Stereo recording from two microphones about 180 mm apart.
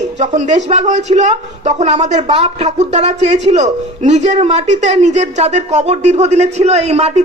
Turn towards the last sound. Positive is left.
turn(degrees=-35)  # may be behind; listen again after turning